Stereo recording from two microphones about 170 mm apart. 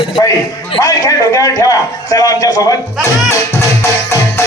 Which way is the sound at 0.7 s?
20° left (ahead or behind).